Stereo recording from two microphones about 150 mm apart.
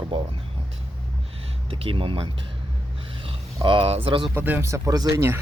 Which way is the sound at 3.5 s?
35° right (ahead or behind).